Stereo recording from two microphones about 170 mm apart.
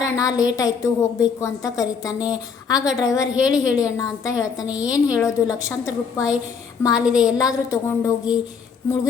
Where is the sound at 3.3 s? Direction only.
5° right (ahead or behind).